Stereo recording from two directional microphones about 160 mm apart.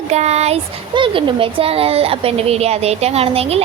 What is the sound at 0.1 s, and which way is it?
Speech, 45° right (ahead or behind).